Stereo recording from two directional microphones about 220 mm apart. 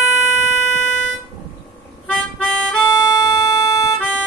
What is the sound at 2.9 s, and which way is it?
Music, 20° left (ahead or behind).